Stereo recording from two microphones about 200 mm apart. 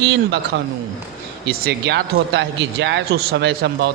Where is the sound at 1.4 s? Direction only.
55° right (ahead or behind).